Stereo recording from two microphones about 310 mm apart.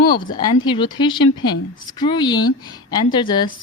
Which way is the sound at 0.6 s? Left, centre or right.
Centre.